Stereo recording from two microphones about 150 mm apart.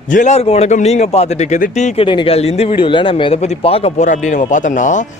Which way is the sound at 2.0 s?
35° left (ahead or behind).